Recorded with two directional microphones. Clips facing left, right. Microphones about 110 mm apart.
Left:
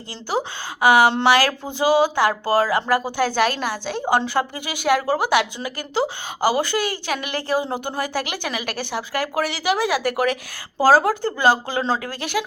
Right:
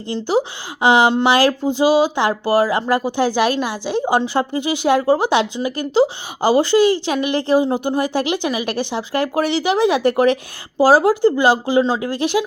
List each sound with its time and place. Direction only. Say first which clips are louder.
0.1 s a woman's voice: right 6 dB; 20° right (ahead or behind)